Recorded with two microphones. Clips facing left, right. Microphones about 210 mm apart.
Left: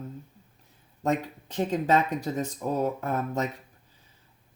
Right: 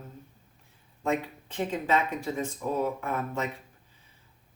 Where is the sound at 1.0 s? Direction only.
40° left (ahead or behind).